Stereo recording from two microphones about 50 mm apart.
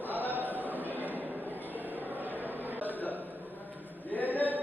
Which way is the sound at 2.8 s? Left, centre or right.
Left.